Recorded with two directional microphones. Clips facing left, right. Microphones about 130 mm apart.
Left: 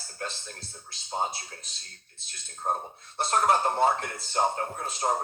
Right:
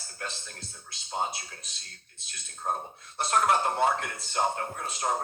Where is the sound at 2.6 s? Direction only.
20° left (ahead or behind).